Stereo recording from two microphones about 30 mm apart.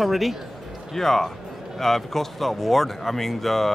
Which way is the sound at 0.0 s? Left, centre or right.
Centre.